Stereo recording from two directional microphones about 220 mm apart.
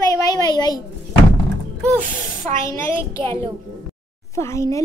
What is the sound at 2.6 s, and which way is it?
A child's voice, 15° left (ahead or behind).